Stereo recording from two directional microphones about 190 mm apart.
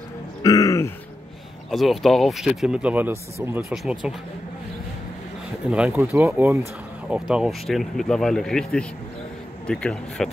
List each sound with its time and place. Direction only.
0.4 s throat clearing: 15° left (ahead or behind)
1.7 s speech: centre (ahead or behind)
5.7 s speech: 5° right (ahead or behind)